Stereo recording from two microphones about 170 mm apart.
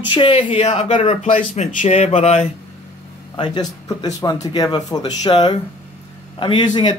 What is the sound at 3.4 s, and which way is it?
Speech, 20° left (ahead or behind).